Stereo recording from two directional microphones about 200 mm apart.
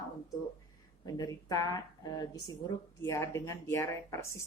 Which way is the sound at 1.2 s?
20° left (ahead or behind).